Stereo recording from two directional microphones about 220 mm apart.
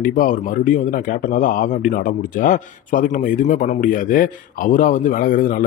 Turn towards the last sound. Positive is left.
turn(degrees=40)  # may be behind; listen again after turning